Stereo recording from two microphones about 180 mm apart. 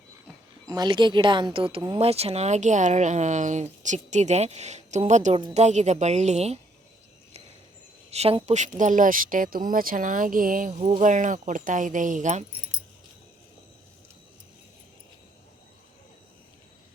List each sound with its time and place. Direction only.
0.7 s speech: 25° right (ahead or behind)
8.1 s speech: 35° right (ahead or behind)